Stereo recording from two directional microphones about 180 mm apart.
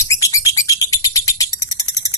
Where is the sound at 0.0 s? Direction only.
15° left (ahead or behind).